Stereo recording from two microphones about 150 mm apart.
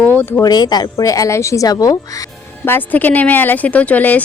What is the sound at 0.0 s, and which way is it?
Speech, 10° left (ahead or behind).